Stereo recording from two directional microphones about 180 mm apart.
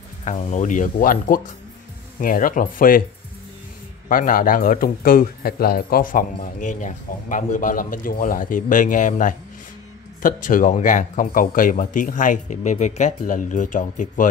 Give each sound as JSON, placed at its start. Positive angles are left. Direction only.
{"t": 0.2, "sound": "speech", "side_deg": 40}
{"t": 4.1, "sound": "speech", "side_deg": 50}